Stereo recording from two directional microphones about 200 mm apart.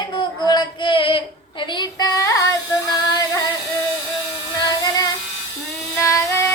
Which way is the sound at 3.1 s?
15° left (ahead or behind).